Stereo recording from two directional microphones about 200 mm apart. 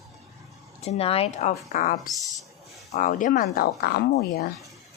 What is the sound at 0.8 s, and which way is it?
Speech, 30° left (ahead or behind).